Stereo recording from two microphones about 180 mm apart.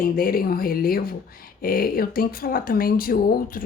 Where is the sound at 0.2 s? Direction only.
55° left (ahead or behind).